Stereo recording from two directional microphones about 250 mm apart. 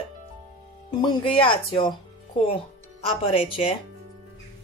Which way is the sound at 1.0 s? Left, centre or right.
Left.